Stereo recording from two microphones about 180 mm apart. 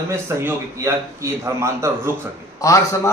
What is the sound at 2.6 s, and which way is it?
Speech, 20° left (ahead or behind).